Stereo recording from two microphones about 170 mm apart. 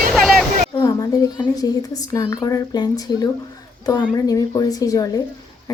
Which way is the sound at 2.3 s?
20° left (ahead or behind).